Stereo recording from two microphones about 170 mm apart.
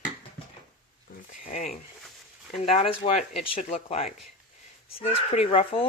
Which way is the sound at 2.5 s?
35° left (ahead or behind).